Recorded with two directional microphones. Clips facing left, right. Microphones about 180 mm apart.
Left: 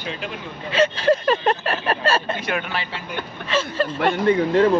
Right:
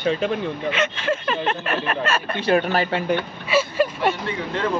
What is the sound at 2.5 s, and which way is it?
Speech, 45° right (ahead or behind).